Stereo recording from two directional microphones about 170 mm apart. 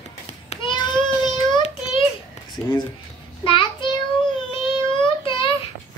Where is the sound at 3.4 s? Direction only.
30° left (ahead or behind).